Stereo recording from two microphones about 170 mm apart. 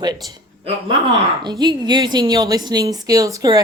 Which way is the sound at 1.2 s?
25° right (ahead or behind).